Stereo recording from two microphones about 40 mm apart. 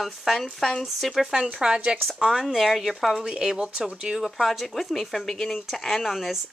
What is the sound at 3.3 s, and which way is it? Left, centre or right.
Speech, right.